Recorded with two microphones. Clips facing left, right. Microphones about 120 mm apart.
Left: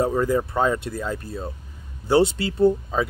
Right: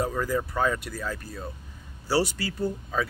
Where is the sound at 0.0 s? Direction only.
25° left (ahead or behind).